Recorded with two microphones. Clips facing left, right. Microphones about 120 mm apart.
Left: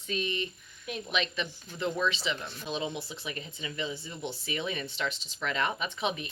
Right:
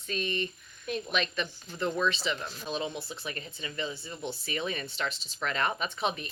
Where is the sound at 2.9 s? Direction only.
20° left (ahead or behind).